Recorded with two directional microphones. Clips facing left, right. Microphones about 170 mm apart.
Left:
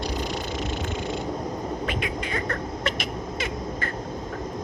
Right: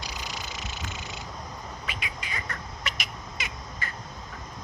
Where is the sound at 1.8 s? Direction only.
10° right (ahead or behind).